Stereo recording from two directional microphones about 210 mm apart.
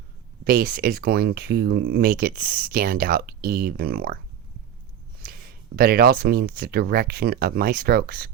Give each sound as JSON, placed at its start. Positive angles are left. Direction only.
{"t": 0.4, "sound": "speech", "side_deg": -45}
{"t": 5.2, "sound": "speech", "side_deg": -45}